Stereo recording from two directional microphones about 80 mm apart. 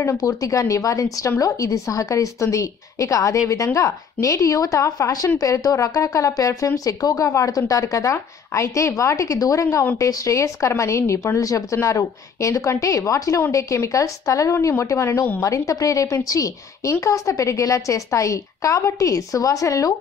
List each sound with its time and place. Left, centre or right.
0.2 s a woman's voice: left